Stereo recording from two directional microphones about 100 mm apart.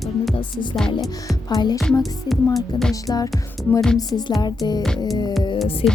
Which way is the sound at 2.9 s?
35° left (ahead or behind).